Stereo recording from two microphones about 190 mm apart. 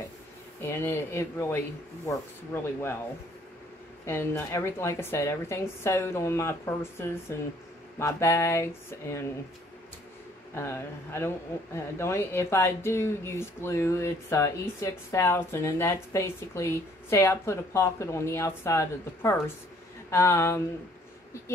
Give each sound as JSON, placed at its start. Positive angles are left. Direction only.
{"t": 0.6, "sound": "speech", "side_deg": 15}
{"t": 4.0, "sound": "speech", "side_deg": 10}
{"t": 10.5, "sound": "speech", "side_deg": 15}